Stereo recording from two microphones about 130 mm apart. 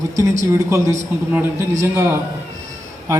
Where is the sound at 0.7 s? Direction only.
20° right (ahead or behind).